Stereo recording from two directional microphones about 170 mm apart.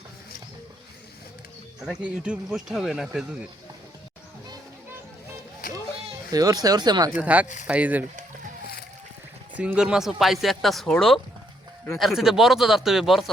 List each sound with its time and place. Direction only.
1.8 s speech: 5° right (ahead or behind)
5.6 s children playing: 55° left (ahead or behind)
6.3 s speech: 20° right (ahead or behind)
7.2 s speech: 10° right (ahead or behind)
9.6 s speech: 5° right (ahead or behind)